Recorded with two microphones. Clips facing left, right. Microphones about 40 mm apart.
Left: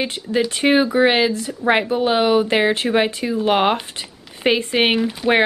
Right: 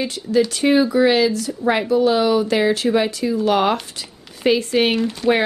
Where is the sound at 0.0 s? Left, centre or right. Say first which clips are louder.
Right 2 dB; left.